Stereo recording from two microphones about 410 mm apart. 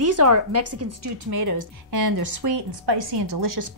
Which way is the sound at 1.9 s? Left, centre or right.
Right.